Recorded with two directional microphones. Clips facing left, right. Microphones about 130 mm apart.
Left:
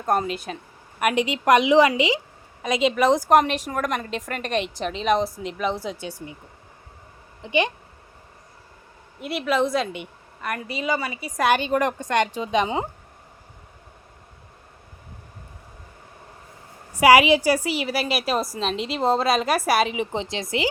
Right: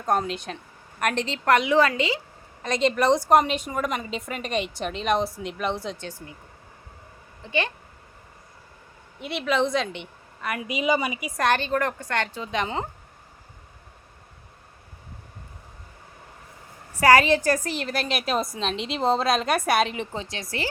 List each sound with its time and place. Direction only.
0.0 s a woman's voice: 5° left (ahead or behind)
7.4 s a woman's voice: 15° left (ahead or behind)
9.2 s a woman's voice: 5° left (ahead or behind)
10.6 s a woman's voice: 15° right (ahead or behind)
11.3 s a woman's voice: 10° left (ahead or behind)
16.9 s a woman's voice: 10° left (ahead or behind)
20.1 s speech: 20° left (ahead or behind)